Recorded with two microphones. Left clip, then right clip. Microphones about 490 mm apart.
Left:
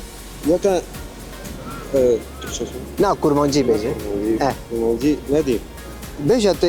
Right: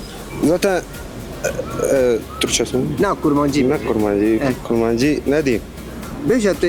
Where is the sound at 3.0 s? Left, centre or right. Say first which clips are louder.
Left 2 dB; centre.